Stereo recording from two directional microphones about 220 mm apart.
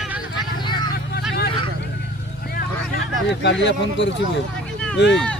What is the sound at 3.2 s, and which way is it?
Speech, 50° left (ahead or behind).